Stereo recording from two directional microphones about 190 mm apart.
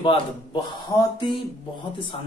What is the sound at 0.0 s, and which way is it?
Speech, 25° left (ahead or behind).